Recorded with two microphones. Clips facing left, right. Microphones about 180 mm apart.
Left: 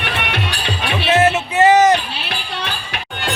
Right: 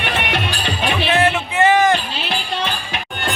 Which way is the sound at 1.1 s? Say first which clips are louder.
Left 5 dB; 25° left (ahead or behind).